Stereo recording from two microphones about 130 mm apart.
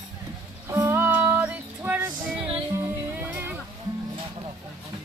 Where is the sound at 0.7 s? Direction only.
20° right (ahead or behind).